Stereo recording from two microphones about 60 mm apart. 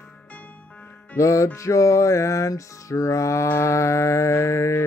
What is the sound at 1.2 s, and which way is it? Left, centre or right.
Music, left.